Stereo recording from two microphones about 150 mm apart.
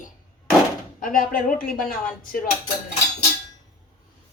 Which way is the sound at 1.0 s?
70° left (ahead or behind).